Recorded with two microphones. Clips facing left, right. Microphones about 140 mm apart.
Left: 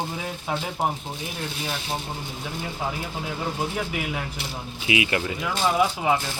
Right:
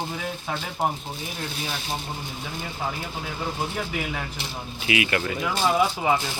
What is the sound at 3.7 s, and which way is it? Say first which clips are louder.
Speech: left 1 dB; 5° left (ahead or behind).